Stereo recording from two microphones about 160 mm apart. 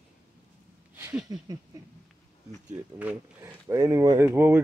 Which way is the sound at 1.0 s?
10° right (ahead or behind).